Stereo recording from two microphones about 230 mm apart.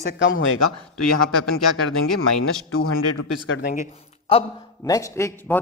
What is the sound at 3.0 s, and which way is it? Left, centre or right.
Speech, left.